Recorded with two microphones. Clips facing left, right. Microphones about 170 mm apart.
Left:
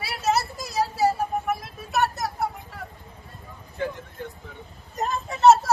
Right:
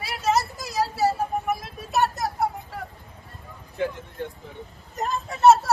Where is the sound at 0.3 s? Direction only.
10° left (ahead or behind).